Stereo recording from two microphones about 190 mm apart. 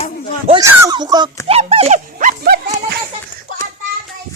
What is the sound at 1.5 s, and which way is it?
Speech, 30° right (ahead or behind).